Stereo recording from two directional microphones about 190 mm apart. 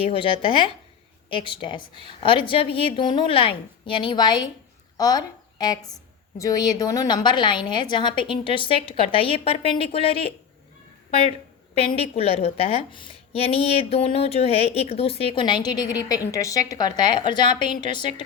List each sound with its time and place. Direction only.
0.1 s a woman's voice: 30° left (ahead or behind)
11.1 s a sound: 30° left (ahead or behind)
11.9 s a woman's voice: 30° left (ahead or behind)